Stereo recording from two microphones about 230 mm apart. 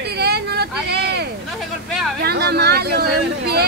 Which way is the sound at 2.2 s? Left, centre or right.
Right.